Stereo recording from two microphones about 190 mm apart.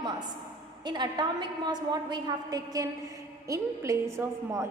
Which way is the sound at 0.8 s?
25° right (ahead or behind).